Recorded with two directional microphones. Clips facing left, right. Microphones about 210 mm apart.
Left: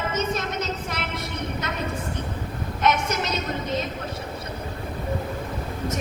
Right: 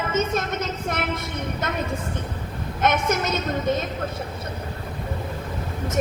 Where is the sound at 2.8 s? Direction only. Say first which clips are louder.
Right 2 dB; 50° right (ahead or behind).